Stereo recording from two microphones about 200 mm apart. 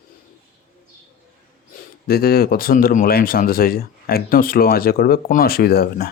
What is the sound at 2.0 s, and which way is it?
Speech, 50° left (ahead or behind).